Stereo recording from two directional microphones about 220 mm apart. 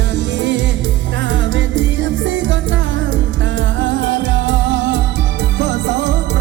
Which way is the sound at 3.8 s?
55° right (ahead or behind).